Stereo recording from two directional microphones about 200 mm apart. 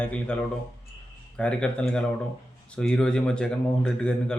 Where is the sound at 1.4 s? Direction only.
5° left (ahead or behind).